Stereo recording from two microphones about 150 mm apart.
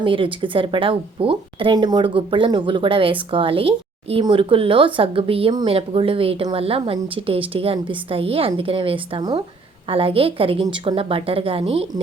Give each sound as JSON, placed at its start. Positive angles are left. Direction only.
{"t": 0.0, "sound": "a woman's voice", "side_deg": -35}